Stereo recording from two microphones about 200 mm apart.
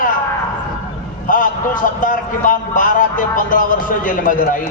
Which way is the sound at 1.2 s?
40° left (ahead or behind).